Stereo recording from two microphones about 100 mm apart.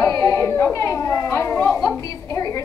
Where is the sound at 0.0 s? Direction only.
35° left (ahead or behind).